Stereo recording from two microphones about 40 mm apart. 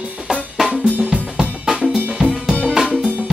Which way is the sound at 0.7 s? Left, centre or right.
Right.